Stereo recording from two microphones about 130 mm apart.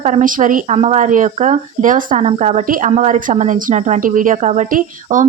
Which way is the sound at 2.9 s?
65° right (ahead or behind).